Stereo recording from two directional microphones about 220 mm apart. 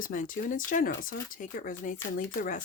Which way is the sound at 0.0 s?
35° left (ahead or behind).